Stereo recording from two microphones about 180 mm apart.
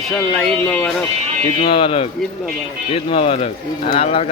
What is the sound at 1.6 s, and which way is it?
A man's voice, 30° left (ahead or behind).